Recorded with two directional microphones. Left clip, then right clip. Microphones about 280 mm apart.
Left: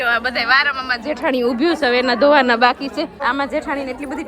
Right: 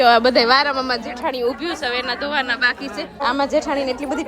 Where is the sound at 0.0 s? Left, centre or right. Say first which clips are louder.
Right 5 dB; centre.